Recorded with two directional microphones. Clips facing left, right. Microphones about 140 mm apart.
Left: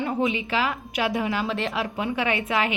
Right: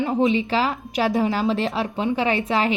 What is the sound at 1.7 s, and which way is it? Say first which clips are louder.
A woman's voice: right 4 dB; 25° right (ahead or behind).